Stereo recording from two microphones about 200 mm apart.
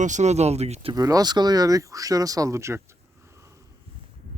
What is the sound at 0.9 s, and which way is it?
Speech, 20° right (ahead or behind).